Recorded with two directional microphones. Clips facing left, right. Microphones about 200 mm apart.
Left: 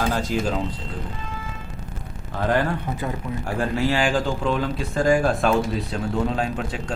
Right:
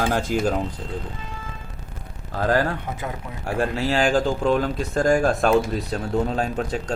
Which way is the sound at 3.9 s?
40° right (ahead or behind).